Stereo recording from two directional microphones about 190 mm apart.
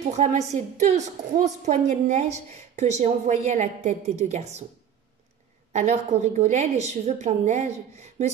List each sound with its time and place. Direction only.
0.1 s a woman's voice: 40° right (ahead or behind)
5.7 s a woman's voice: 35° right (ahead or behind)